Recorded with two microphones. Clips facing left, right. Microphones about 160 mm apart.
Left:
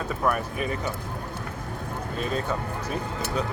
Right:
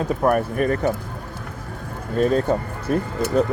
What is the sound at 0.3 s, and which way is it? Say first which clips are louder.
Speech: right 7 dB; 55° right (ahead or behind).